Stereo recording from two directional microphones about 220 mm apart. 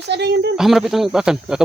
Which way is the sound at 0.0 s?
50° right (ahead or behind).